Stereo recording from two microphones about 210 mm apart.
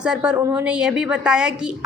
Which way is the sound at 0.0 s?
5° right (ahead or behind).